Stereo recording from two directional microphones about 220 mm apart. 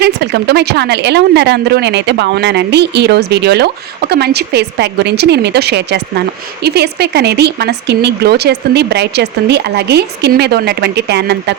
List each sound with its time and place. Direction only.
0.0 s a woman's voice: 50° right (ahead or behind)